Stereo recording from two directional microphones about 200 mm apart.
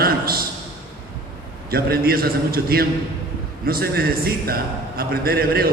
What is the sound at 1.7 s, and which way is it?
A man's voice, 50° right (ahead or behind).